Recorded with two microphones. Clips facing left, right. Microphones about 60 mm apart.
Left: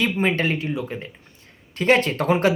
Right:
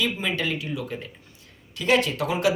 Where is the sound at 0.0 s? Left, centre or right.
Left.